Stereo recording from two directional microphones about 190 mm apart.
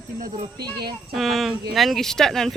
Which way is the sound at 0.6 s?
20° right (ahead or behind).